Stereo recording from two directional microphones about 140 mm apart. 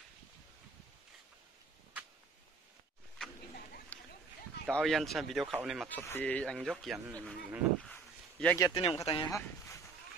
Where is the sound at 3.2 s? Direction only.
5° left (ahead or behind).